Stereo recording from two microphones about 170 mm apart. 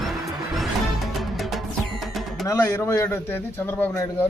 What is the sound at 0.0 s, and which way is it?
Music, centre (ahead or behind).